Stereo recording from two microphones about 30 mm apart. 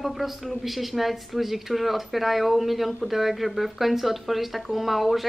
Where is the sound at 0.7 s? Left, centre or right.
Centre.